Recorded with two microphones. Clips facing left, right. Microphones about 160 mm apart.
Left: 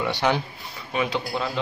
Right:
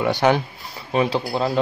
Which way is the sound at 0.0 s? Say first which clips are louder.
Right 5 dB; 50° right (ahead or behind).